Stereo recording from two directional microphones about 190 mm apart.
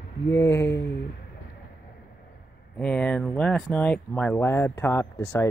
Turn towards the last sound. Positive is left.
turn(degrees=15)  # may be behind; listen again after turning